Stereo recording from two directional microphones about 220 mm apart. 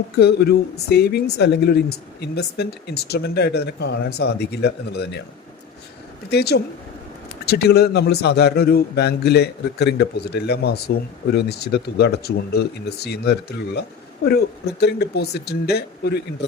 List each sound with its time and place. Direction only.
0.2 s a man's voice: 45° left (ahead or behind)
6.3 s a man's voice: 45° left (ahead or behind)